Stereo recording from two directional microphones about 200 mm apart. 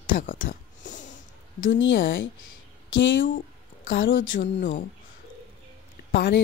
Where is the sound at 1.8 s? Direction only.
70° left (ahead or behind).